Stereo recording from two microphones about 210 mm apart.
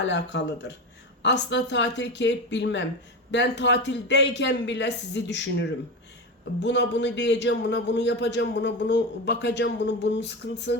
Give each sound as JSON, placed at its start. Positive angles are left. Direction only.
{"t": 0.0, "sound": "a man's voice", "side_deg": 55}